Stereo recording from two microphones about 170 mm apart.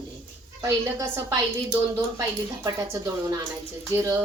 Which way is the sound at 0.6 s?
15° right (ahead or behind).